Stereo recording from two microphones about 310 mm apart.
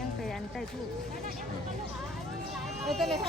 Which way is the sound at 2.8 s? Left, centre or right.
Centre.